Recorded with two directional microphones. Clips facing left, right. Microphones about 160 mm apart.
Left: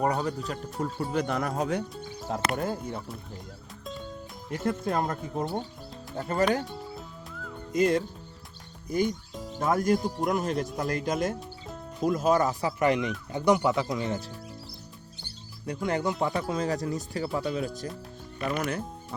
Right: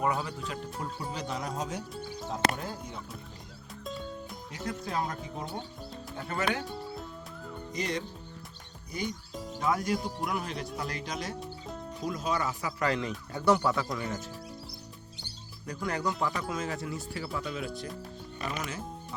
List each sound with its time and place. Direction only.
0.0 s speech: 40° left (ahead or behind)
1.1 s speech: 55° left (ahead or behind)
4.5 s speech: 55° left (ahead or behind)
7.7 s speech: 50° left (ahead or behind)
9.3 s music: centre (ahead or behind)
9.6 s speech: 50° left (ahead or behind)
12.8 s speech: 20° left (ahead or behind)
15.6 s speech: 25° left (ahead or behind)
18.4 s speech: 55° left (ahead or behind)